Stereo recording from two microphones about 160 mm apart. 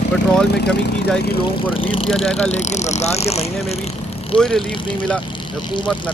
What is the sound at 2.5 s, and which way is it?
Speech, 45° left (ahead or behind).